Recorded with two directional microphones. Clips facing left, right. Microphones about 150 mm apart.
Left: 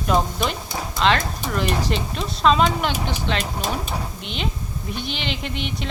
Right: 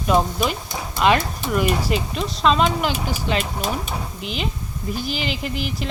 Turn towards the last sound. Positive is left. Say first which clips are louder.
# right 2 dB
turn(degrees=0)  # may be behind; listen again after turning